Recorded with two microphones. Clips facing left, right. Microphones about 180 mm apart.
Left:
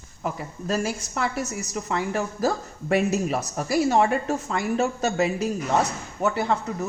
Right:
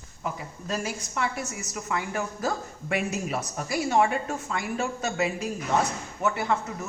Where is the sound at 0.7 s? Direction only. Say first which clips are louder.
Left 5 dB; 40° left (ahead or behind).